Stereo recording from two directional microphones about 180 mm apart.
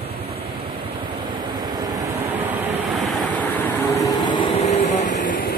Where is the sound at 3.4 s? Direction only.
10° left (ahead or behind).